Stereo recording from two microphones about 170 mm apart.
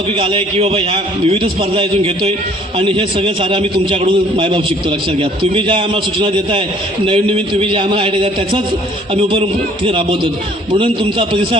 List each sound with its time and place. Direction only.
0.2 s a man's voice: 35° right (ahead or behind)
9.8 s a man's voice: 30° right (ahead or behind)